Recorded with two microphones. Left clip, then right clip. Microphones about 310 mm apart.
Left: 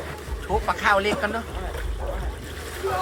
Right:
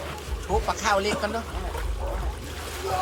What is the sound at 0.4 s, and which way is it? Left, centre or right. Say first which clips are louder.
Speech: left 3 dB; centre.